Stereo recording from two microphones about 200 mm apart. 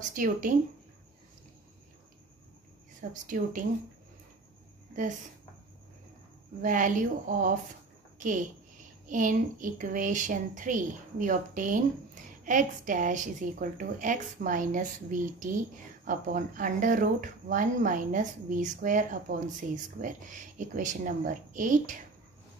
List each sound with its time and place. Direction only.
0.1 s a woman's voice: 40° right (ahead or behind)
3.0 s a woman's voice: 40° right (ahead or behind)
6.6 s a woman's voice: 40° right (ahead or behind)
9.0 s a woman's voice: 40° right (ahead or behind)